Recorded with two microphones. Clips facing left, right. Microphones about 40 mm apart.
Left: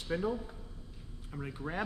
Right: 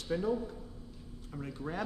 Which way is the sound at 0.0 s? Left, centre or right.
Centre.